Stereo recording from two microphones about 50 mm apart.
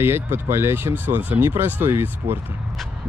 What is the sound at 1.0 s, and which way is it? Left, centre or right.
Speech, right.